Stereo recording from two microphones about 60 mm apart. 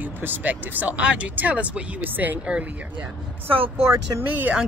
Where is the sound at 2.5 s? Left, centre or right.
Centre.